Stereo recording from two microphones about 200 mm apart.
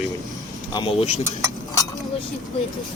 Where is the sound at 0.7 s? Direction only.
25° left (ahead or behind).